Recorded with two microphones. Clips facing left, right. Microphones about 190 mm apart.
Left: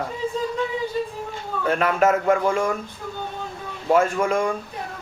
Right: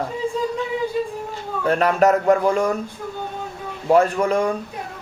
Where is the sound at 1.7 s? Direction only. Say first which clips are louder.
Right 3 dB; 40° right (ahead or behind).